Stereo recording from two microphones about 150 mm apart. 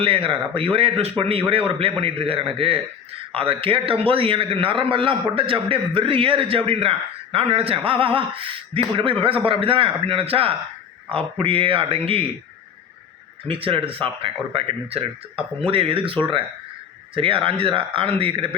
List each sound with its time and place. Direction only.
0.0 s a man's voice: 35° right (ahead or behind)
13.4 s a man's voice: 35° right (ahead or behind)